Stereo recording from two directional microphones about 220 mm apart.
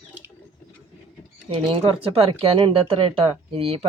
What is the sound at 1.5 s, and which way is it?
Speech, 20° right (ahead or behind).